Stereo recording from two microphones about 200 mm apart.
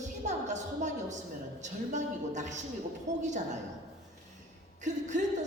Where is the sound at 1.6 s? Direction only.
35° right (ahead or behind).